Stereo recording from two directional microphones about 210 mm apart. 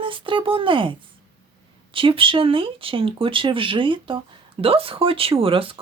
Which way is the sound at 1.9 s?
25° right (ahead or behind).